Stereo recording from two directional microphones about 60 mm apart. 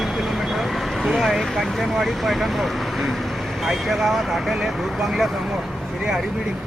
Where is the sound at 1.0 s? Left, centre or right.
Centre.